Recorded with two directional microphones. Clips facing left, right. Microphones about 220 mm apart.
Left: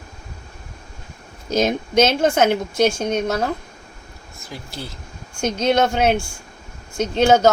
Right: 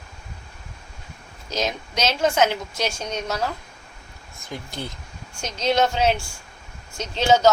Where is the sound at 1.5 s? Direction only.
50° left (ahead or behind).